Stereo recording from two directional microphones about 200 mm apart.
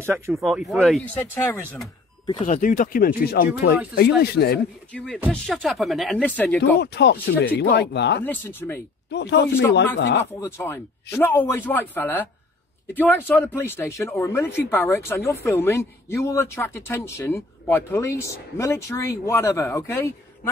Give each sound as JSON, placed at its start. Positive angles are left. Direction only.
{"t": 0.3, "sound": "speech", "side_deg": 0}
{"t": 2.4, "sound": "speech", "side_deg": 40}
{"t": 4.9, "sound": "speech", "side_deg": 5}
{"t": 6.8, "sound": "speech", "side_deg": 55}
{"t": 8.3, "sound": "speech", "side_deg": 10}
{"t": 9.1, "sound": "speech", "side_deg": 60}
{"t": 10.4, "sound": "speech", "side_deg": 15}